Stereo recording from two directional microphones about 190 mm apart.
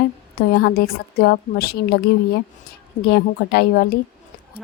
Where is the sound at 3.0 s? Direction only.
60° left (ahead or behind).